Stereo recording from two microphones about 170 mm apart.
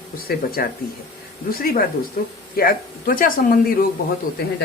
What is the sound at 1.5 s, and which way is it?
A man's voice, 60° left (ahead or behind).